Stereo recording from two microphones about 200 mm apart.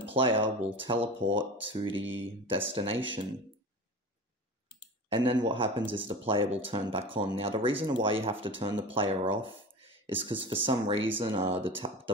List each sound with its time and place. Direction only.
0.1 s speech: 25° right (ahead or behind)
1.9 s speech: 75° right (ahead or behind)
2.1 s speech: 25° right (ahead or behind)
5.1 s speech: 25° right (ahead or behind)